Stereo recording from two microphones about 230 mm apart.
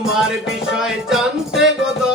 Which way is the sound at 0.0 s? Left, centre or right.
Centre.